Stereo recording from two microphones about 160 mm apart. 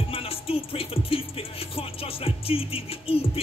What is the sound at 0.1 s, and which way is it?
Music, 35° left (ahead or behind).